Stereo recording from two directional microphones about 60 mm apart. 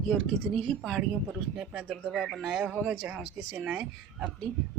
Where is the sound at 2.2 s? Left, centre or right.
Centre.